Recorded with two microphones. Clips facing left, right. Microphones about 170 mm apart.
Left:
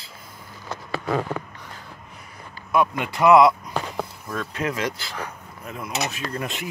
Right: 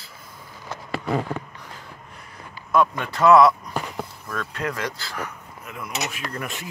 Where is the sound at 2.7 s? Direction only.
15° left (ahead or behind).